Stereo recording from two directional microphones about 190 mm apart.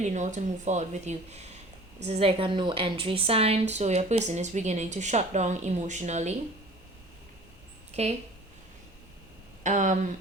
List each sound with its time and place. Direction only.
0.0 s a woman's voice: 40° right (ahead or behind)
8.0 s a woman's voice: 35° right (ahead or behind)
9.6 s a woman's voice: 40° right (ahead or behind)